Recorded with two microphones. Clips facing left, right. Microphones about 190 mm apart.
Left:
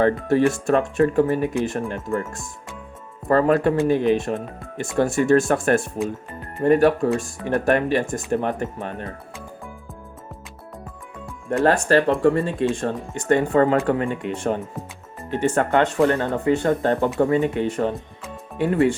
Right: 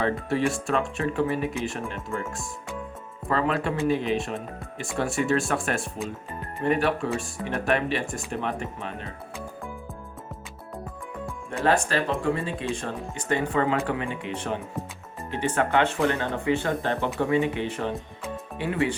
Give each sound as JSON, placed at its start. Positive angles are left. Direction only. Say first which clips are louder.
{"t": 0.0, "sound": "speech", "louder": "left 7 dB", "side_deg": 50}
{"t": 11.9, "sound": "speech", "louder": "left 8 dB", "side_deg": 55}